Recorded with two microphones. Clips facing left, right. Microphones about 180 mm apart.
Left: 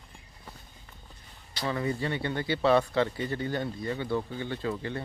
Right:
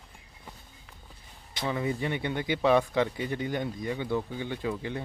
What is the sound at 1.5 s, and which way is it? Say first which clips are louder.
Speech: even; 15° right (ahead or behind).